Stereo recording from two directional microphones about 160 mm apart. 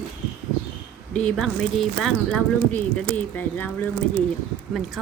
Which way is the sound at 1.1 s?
5° left (ahead or behind).